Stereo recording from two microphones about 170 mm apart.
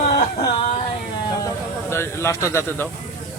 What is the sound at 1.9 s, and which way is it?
Speech, 15° left (ahead or behind).